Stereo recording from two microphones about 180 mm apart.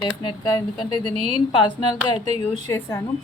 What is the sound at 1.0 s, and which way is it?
A woman's voice, 25° left (ahead or behind).